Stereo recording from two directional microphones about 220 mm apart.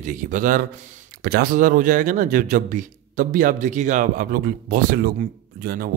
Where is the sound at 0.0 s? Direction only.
35° right (ahead or behind).